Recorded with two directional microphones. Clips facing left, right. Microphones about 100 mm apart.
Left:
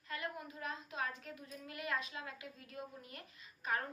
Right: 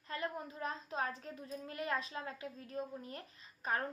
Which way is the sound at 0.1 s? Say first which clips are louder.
Right 3 dB; 35° right (ahead or behind).